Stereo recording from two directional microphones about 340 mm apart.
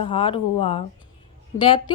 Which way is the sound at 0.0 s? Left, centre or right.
Centre.